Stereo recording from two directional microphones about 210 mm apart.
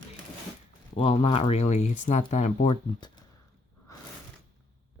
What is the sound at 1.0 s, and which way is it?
Speech, 30° left (ahead or behind).